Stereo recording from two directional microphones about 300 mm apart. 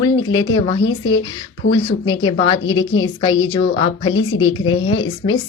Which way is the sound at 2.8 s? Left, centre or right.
Centre.